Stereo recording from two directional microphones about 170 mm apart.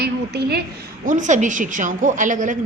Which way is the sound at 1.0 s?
50° right (ahead or behind).